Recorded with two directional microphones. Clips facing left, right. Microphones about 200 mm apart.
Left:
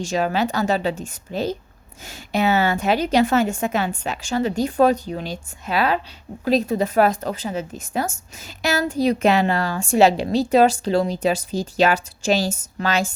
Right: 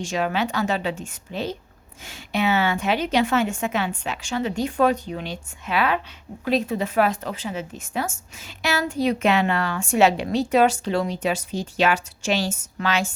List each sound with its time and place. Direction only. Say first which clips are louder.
0.0 s a woman's voice: left 3 dB; 35° left (ahead or behind)